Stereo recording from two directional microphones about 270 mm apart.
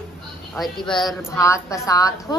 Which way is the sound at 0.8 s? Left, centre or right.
Centre.